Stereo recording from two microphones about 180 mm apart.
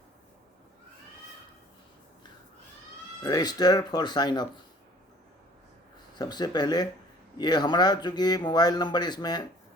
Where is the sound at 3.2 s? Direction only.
20° left (ahead or behind).